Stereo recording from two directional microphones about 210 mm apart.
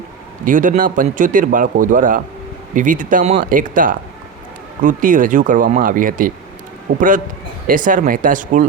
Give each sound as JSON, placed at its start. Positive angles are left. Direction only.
{"t": 0.4, "sound": "speech", "side_deg": -40}
{"t": 6.9, "sound": "a man's voice", "side_deg": -55}
{"t": 7.7, "sound": "speech", "side_deg": -40}